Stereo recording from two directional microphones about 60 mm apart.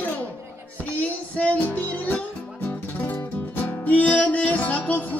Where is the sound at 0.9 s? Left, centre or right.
Left.